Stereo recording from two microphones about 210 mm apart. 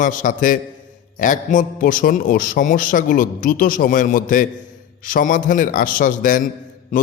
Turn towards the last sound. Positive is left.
turn(degrees=35)  # may be behind; listen again after turning